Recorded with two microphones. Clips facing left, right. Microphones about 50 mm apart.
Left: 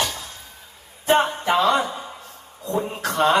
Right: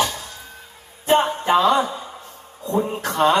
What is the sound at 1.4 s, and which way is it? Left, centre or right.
Speech, right.